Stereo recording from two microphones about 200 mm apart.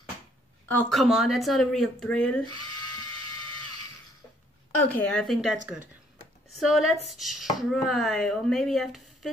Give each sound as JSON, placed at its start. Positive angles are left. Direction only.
{"t": 0.7, "sound": "speech", "side_deg": 5}
{"t": 4.9, "sound": "speech", "side_deg": 10}
{"t": 6.6, "sound": "speech", "side_deg": 0}